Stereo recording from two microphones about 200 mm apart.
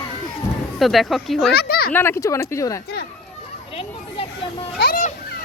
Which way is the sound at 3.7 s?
30° left (ahead or behind).